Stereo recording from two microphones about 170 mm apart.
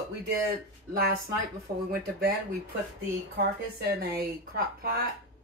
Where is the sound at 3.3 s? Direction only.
60° right (ahead or behind).